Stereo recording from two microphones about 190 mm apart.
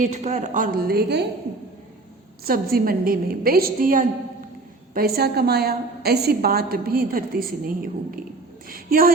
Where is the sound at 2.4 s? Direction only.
50° right (ahead or behind).